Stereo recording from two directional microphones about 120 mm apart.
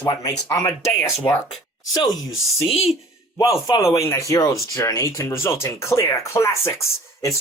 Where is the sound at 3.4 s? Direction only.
30° left (ahead or behind).